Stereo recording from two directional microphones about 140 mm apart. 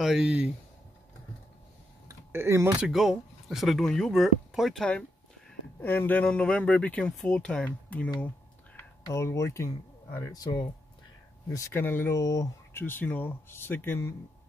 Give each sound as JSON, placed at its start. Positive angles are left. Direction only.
{"t": 0.0, "sound": "speech", "side_deg": -5}
{"t": 2.0, "sound": "a sound", "side_deg": -20}
{"t": 2.8, "sound": "speech", "side_deg": -5}
{"t": 5.8, "sound": "speech", "side_deg": 15}
{"t": 9.1, "sound": "speech", "side_deg": 20}